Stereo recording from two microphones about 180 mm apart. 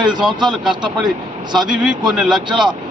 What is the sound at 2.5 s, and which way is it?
Speech, 25° right (ahead or behind).